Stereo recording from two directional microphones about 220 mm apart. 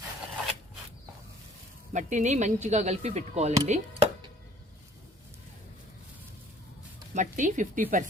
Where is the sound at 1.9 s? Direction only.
35° right (ahead or behind).